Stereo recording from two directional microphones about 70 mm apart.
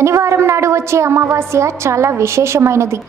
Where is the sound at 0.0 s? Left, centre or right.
Right.